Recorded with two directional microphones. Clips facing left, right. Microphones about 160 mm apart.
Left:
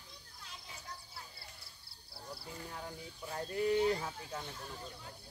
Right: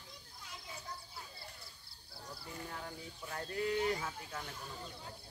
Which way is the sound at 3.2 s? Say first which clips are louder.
Left 4 dB; 20° left (ahead or behind).